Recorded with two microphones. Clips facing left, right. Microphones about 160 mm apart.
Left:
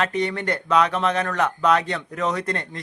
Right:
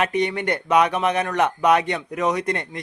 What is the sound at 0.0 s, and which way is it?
A man's voice, 15° right (ahead or behind).